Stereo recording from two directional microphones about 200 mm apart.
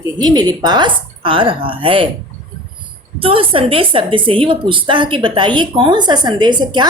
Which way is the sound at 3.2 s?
25° right (ahead or behind).